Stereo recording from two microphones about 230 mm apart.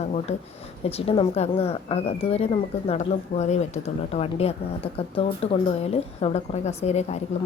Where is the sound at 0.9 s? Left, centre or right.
Left.